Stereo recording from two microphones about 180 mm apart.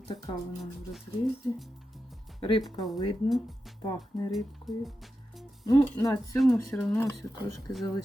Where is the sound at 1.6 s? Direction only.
Centre (ahead or behind).